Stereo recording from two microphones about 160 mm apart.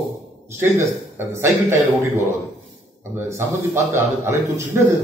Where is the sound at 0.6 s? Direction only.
15° right (ahead or behind).